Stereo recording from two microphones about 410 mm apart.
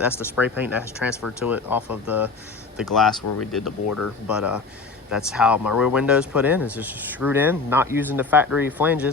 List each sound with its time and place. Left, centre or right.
0.0 s speech: centre
3.8 s speech: left
4.3 s speech: centre